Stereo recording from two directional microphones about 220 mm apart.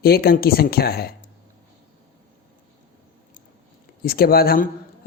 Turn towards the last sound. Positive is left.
turn(degrees=40)  # may be behind; listen again after turning